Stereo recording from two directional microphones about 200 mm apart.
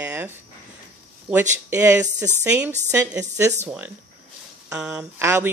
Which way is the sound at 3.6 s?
10° right (ahead or behind).